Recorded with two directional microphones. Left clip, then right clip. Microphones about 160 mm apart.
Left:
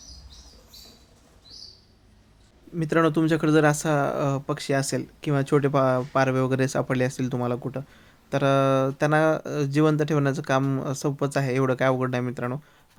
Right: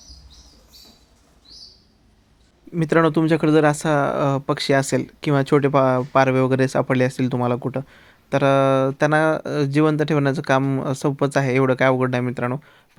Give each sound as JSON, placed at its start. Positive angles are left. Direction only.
{"t": 2.7, "sound": "speech", "side_deg": -20}
{"t": 11.0, "sound": "speech", "side_deg": -15}